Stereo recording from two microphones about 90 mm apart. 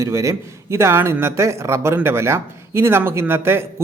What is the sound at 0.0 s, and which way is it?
A man's voice, 35° right (ahead or behind).